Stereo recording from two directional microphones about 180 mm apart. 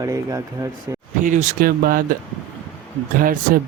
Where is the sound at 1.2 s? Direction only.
45° right (ahead or behind).